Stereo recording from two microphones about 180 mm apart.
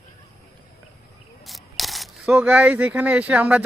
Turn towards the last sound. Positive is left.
turn(degrees=-5)  # may be behind; listen again after turning